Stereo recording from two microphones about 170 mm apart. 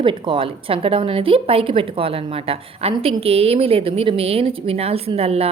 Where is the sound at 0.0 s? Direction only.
30° right (ahead or behind).